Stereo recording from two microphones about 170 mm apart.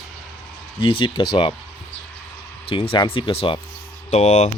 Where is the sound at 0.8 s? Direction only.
30° left (ahead or behind).